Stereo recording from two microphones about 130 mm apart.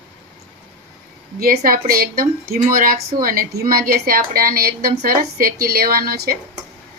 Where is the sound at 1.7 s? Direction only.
90° right.